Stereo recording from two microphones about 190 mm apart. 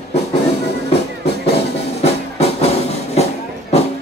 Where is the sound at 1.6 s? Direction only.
35° left (ahead or behind).